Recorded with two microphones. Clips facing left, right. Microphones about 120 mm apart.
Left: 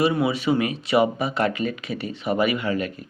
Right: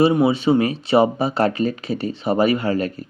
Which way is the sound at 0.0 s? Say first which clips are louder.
Right 5 dB; 25° right (ahead or behind).